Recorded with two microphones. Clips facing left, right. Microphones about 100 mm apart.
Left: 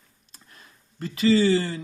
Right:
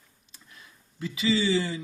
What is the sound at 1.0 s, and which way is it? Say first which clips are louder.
Speech: left 6 dB; 50° left (ahead or behind).